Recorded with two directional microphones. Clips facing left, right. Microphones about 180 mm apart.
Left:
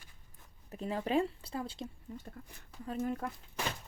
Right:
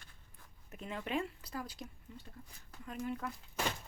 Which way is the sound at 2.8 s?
40° left (ahead or behind).